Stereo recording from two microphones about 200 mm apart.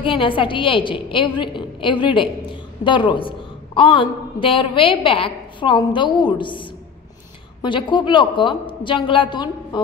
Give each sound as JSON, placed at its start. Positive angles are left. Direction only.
{"t": 0.0, "sound": "a woman's voice", "side_deg": 25}